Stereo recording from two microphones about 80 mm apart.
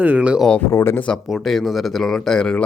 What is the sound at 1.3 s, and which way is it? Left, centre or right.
Speech, centre.